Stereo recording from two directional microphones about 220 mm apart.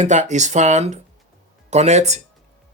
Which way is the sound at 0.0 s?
30° right (ahead or behind).